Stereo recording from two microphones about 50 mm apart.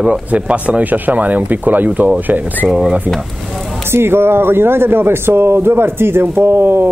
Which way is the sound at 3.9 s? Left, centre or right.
Right.